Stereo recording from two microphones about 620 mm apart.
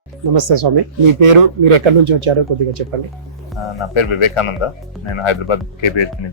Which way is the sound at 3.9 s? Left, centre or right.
Left.